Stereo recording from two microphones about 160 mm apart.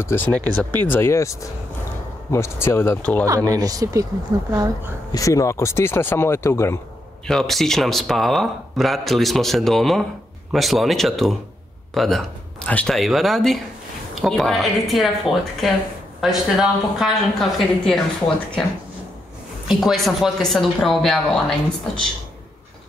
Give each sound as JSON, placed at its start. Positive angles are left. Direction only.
{"t": 0.0, "sound": "speech", "side_deg": 15}
{"t": 3.3, "sound": "speech", "side_deg": -20}
{"t": 5.1, "sound": "speech", "side_deg": 20}
{"t": 7.2, "sound": "speech", "side_deg": 0}
{"t": 19.7, "sound": "speech", "side_deg": 0}